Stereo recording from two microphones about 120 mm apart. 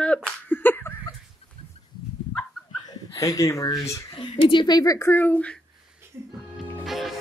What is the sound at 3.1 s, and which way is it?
Speech, 25° left (ahead or behind).